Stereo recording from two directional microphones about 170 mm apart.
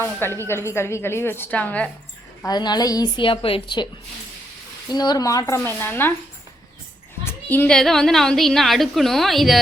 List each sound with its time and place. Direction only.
0.0 s a woman's voice: 15° left (ahead or behind)
2.4 s a woman's voice: 25° left (ahead or behind)
4.9 s a woman's voice: 25° left (ahead or behind)
7.3 s a woman's voice: 10° left (ahead or behind)